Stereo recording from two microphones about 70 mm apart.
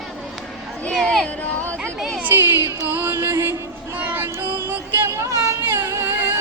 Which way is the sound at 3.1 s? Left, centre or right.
Right.